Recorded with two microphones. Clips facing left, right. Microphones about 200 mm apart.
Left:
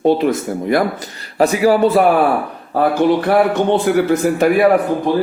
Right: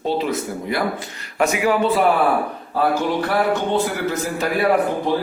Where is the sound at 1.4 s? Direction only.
35° left (ahead or behind).